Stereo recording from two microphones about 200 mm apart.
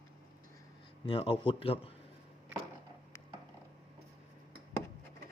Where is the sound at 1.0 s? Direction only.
25° left (ahead or behind).